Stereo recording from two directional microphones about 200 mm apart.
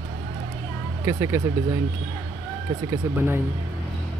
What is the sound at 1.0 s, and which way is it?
Speech, 15° right (ahead or behind).